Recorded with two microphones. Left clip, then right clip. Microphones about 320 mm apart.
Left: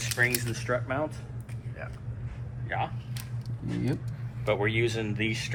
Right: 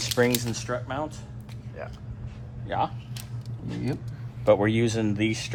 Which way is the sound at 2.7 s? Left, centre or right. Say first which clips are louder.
Right 5 dB; centre.